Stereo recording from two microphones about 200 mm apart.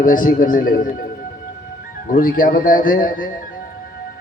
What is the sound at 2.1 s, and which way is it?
Music, 45° left (ahead or behind).